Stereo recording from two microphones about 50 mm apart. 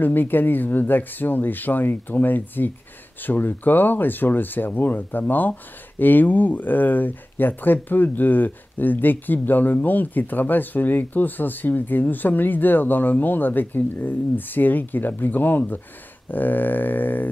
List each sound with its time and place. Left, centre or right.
0.0 s speech: left